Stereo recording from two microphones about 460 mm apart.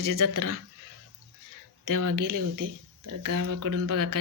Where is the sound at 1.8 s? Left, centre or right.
Right.